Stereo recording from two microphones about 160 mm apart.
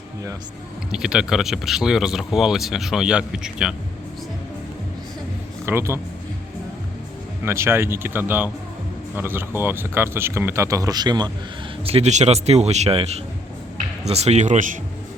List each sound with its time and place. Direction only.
0.9 s speech: 5° right (ahead or behind)
5.6 s speech: 15° right (ahead or behind)
7.4 s speech: 15° right (ahead or behind)
11.9 s a man's voice: 40° right (ahead or behind)